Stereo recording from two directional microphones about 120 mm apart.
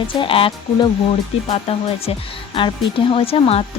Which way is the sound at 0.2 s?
50° left (ahead or behind).